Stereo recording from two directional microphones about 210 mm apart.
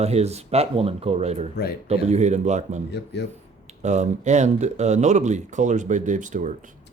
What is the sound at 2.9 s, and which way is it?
Speech, 55° left (ahead or behind).